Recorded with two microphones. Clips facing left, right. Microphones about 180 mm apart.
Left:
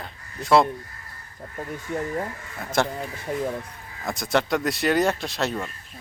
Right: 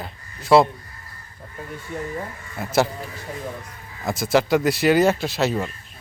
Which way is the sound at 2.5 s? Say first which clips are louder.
Right 4 dB; 5° right (ahead or behind).